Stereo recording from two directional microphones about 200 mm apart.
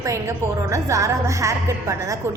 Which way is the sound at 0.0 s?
15° right (ahead or behind).